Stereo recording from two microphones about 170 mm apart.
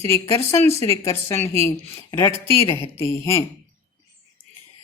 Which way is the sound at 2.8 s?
15° left (ahead or behind).